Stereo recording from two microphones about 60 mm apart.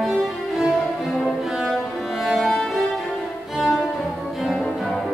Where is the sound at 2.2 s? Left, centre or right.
Centre.